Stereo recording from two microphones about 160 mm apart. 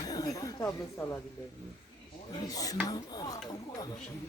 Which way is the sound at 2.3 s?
20° left (ahead or behind).